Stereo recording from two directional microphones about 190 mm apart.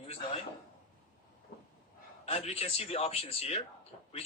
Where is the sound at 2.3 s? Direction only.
30° left (ahead or behind).